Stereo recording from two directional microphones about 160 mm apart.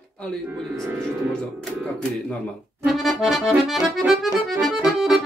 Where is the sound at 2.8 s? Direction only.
Centre (ahead or behind).